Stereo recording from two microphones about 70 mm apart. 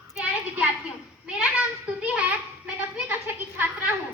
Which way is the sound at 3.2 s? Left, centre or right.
Right.